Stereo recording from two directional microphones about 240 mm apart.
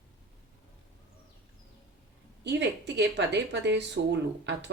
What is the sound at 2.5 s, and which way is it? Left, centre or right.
Speech, right.